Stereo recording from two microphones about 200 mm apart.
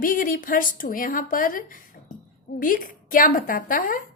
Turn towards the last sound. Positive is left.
turn(degrees=45)  # may be behind; listen again after turning